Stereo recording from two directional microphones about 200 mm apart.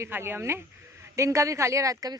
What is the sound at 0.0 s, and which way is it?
A woman's voice, 10° right (ahead or behind).